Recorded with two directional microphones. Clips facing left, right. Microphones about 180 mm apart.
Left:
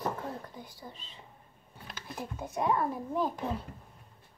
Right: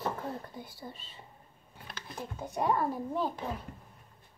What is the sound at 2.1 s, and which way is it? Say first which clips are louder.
A child's voice: even; 5° left (ahead or behind).